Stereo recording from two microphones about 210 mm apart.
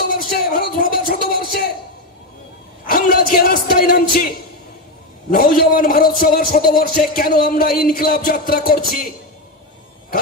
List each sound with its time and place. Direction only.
0.1 s a sound: 45° left (ahead or behind)
2.9 s speech: 45° left (ahead or behind)
5.3 s music: 45° left (ahead or behind)